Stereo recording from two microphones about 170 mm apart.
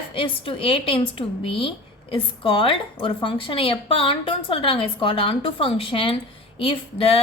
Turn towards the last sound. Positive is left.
turn(degrees=35)  # may be behind; listen again after turning